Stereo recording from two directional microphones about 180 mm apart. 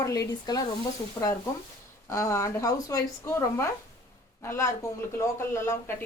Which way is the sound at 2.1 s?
15° left (ahead or behind).